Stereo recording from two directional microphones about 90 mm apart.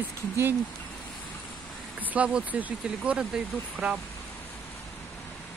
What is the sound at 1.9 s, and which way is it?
Speech, 15° right (ahead or behind).